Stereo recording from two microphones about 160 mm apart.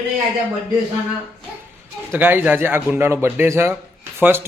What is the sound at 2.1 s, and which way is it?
Speech, 10° right (ahead or behind).